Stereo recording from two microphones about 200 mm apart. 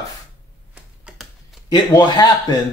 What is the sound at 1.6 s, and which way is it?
Speech, 20° left (ahead or behind).